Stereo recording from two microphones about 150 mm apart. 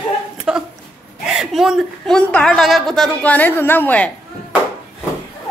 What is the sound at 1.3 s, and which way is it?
A woman's voice, 5° right (ahead or behind).